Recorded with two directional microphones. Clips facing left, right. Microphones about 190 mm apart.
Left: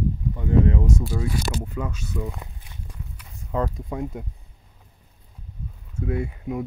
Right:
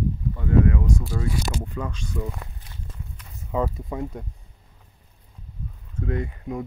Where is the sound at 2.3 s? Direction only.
15° left (ahead or behind).